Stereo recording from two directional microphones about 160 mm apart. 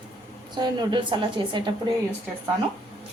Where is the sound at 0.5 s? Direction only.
25° right (ahead or behind).